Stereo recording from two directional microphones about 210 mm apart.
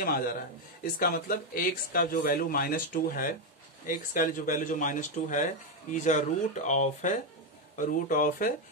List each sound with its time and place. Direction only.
0.9 s speech: 45° left (ahead or behind)